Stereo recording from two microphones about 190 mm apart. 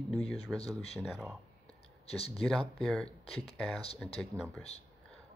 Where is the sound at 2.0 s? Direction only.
30° left (ahead or behind).